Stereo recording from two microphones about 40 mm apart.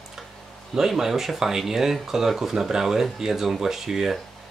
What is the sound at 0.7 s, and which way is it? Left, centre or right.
Speech, centre.